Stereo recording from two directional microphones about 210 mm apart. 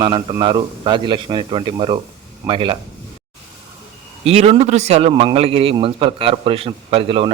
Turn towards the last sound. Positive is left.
turn(degrees=-25)  # may be behind; listen again after turning